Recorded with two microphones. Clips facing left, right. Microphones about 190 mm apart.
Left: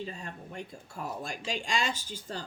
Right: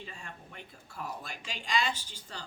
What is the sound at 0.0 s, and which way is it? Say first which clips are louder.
Speech: left 7 dB; 40° left (ahead or behind).